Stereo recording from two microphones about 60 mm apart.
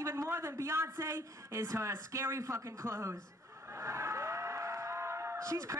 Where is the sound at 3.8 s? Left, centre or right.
Right.